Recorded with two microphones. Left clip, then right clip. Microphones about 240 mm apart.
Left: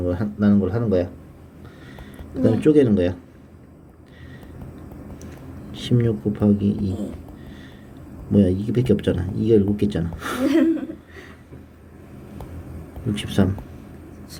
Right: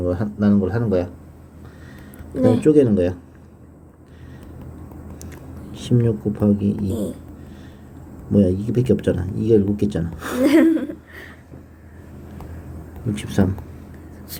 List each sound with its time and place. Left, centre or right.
0.0 s speech: centre
2.6 s speech: centre
5.7 s speech: centre
8.3 s speech: centre
10.4 s a sound: right
13.1 s speech: centre